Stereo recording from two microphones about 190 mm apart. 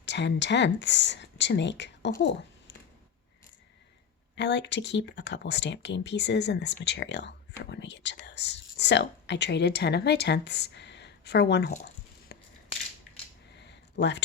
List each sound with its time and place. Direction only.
0.0 s speech: 65° left (ahead or behind)
4.4 s speech: 65° left (ahead or behind)
13.6 s a sound: 65° left (ahead or behind)